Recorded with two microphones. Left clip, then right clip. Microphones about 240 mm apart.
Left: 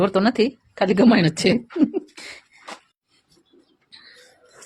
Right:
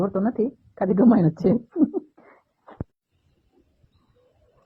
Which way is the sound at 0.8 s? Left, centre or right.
Centre.